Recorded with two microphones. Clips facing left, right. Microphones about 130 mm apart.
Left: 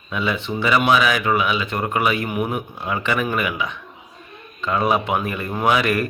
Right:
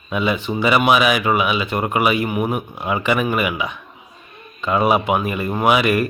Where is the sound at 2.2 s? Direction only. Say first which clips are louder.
Right 2 dB; 5° right (ahead or behind).